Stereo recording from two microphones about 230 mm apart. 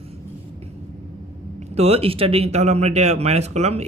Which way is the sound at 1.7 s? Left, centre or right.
Right.